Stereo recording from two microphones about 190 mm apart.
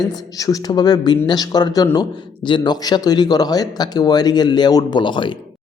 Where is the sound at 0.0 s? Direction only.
20° left (ahead or behind).